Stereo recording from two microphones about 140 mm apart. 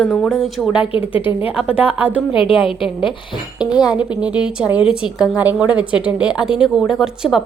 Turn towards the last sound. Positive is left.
turn(degrees=-5)  # may be behind; listen again after turning